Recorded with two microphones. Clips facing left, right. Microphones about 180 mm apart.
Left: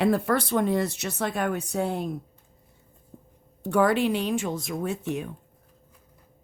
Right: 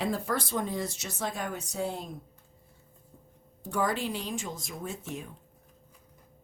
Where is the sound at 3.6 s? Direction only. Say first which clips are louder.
Left 8 dB; 65° left (ahead or behind).